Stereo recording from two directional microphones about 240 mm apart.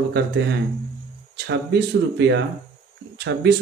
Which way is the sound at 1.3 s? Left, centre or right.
Right.